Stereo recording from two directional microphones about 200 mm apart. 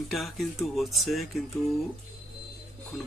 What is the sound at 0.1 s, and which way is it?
Speech, centre (ahead or behind).